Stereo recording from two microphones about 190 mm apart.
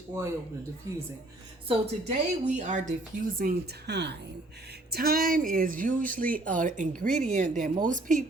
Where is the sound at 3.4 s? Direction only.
55° right (ahead or behind).